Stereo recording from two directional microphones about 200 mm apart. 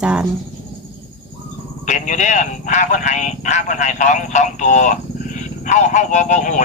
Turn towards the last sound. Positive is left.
turn(degrees=40)  # may be behind; listen again after turning